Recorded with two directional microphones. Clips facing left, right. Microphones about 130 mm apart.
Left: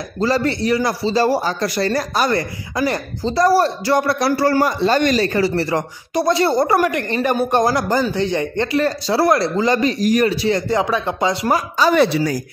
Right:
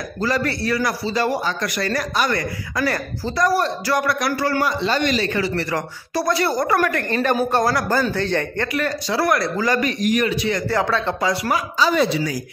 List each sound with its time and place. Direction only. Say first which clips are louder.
0.2 s a man's voice: left 4 dB; 25° left (ahead or behind)
5.5 s speech: left 4 dB; 25° left (ahead or behind)
8.7 s speech: left 5 dB; 30° left (ahead or behind)
10.7 s speech: left 2 dB; 15° left (ahead or behind)
11.5 s speech: left 5 dB; 55° left (ahead or behind)